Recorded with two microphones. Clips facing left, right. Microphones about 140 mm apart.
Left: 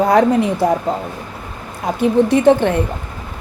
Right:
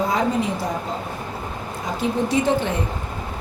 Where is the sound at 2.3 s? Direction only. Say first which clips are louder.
Left 7 dB; 60° left (ahead or behind).